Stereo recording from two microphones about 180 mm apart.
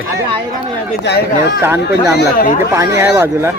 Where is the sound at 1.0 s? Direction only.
70° left (ahead or behind).